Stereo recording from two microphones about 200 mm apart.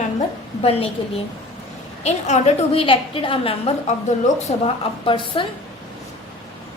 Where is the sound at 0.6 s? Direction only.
30° left (ahead or behind).